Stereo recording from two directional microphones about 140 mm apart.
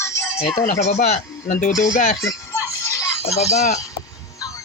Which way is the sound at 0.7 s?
55° left (ahead or behind).